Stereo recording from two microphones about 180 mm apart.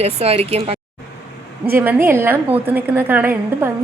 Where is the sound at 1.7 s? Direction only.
10° right (ahead or behind).